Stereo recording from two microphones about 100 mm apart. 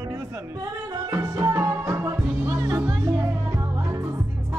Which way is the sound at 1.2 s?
30° right (ahead or behind).